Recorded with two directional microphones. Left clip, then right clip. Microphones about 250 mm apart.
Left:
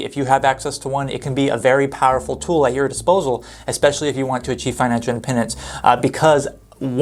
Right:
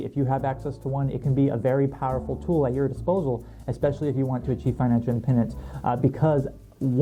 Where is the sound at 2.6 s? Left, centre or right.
Centre.